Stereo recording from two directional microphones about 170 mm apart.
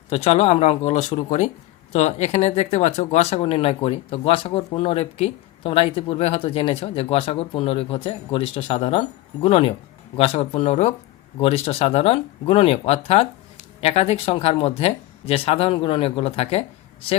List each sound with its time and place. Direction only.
0.1 s speech: 40° left (ahead or behind)